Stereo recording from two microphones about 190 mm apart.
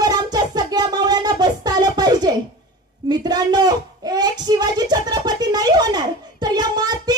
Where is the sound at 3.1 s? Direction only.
20° right (ahead or behind).